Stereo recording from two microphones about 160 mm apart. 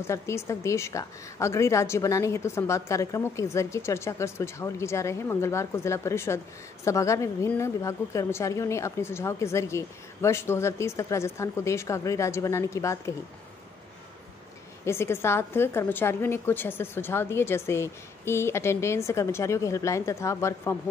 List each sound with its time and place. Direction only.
0.0 s a woman's voice: 15° left (ahead or behind)
14.9 s a woman's voice: 15° left (ahead or behind)